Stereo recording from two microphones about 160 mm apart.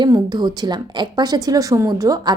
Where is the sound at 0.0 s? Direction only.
25° right (ahead or behind).